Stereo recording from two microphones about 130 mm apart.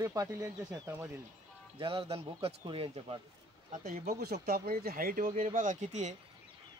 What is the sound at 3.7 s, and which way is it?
Speech, 80° right.